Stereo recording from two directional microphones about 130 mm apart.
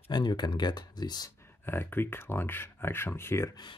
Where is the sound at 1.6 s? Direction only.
15° left (ahead or behind).